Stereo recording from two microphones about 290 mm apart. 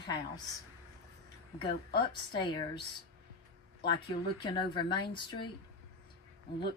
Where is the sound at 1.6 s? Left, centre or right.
Centre.